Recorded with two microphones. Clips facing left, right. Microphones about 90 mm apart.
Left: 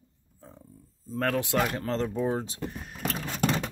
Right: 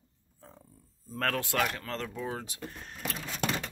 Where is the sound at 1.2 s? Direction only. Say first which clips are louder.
Left 3 dB; 15° left (ahead or behind).